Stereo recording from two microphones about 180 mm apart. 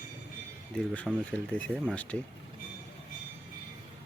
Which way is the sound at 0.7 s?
5° left (ahead or behind).